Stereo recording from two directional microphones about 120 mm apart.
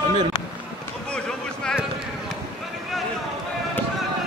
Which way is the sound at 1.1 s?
5° left (ahead or behind).